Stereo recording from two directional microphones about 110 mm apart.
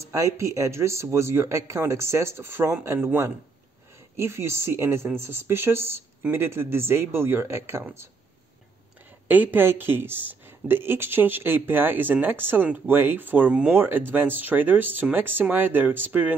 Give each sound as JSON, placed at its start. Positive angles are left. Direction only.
{"t": 0.0, "sound": "speech", "side_deg": -30}
{"t": 9.3, "sound": "speech", "side_deg": -15}